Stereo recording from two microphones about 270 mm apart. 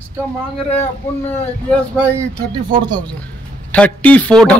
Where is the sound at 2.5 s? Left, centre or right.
Centre.